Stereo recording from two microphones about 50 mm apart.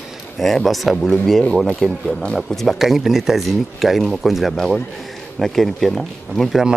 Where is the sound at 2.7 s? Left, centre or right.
Centre.